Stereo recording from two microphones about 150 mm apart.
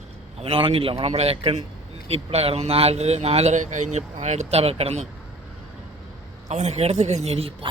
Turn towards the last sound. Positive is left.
turn(degrees=-40)  # may be behind; listen again after turning